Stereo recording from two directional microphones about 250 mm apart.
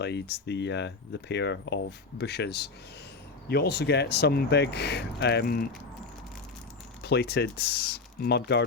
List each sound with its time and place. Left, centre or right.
0.0 s speech: left
7.0 s speech: left